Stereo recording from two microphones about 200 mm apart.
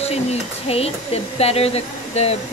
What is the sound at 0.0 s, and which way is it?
Speech, 30° left (ahead or behind).